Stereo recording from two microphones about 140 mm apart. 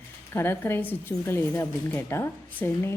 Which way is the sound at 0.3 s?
15° left (ahead or behind).